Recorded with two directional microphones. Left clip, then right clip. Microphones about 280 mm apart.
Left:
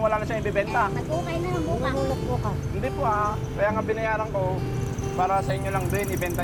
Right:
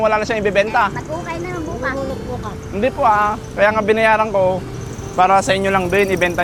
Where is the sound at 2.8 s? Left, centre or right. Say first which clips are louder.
Right 11 dB; right.